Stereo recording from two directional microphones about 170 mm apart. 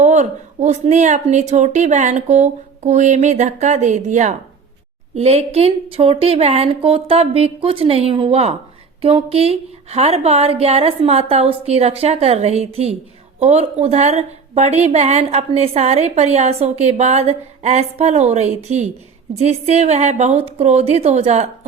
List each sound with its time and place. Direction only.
0.0 s a woman's voice: 45° right (ahead or behind)